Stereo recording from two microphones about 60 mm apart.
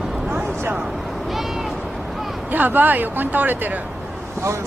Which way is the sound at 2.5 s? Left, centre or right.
Right.